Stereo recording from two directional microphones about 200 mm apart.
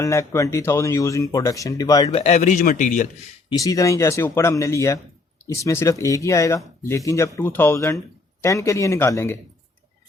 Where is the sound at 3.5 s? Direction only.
15° left (ahead or behind).